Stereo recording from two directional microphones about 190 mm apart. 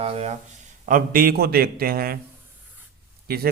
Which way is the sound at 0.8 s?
45° right (ahead or behind).